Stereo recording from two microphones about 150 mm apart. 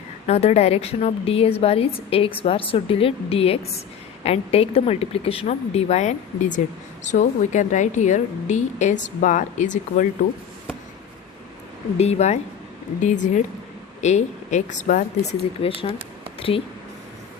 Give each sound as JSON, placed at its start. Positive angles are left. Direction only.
{"t": 0.3, "sound": "a woman's voice", "side_deg": 45}
{"t": 11.9, "sound": "a woman's voice", "side_deg": 45}
{"t": 15.6, "sound": "a woman's voice", "side_deg": 40}